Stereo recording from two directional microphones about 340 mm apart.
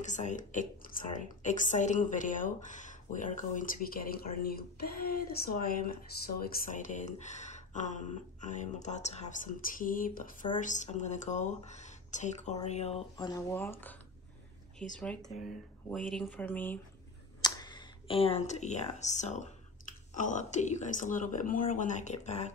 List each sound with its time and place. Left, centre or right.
0.0 s a woman's voice: left; by 13.9 s centre
15.0 s a woman's voice: centre